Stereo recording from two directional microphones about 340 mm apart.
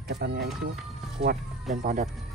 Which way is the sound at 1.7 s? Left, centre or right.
Right.